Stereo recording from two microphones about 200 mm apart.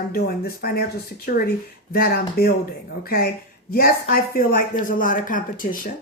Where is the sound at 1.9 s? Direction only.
50° left (ahead or behind).